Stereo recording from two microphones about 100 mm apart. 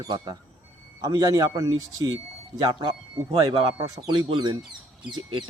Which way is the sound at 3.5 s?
60° right (ahead or behind).